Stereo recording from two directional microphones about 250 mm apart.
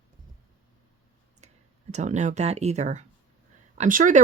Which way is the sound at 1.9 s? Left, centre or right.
Right.